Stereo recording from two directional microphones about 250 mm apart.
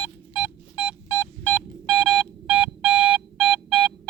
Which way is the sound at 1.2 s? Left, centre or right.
Centre.